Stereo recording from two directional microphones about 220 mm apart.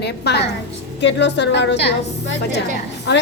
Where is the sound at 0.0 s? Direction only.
50° left (ahead or behind).